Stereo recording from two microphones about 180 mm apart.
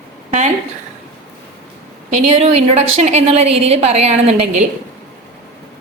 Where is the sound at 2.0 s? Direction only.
35° right (ahead or behind).